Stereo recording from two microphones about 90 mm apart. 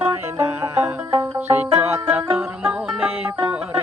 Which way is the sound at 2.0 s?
20° right (ahead or behind).